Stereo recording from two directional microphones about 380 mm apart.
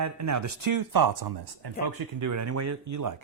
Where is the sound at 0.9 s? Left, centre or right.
Right.